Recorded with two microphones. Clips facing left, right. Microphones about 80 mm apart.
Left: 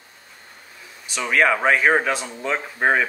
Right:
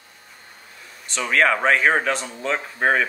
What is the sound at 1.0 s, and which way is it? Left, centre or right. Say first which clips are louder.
Speech: even; centre.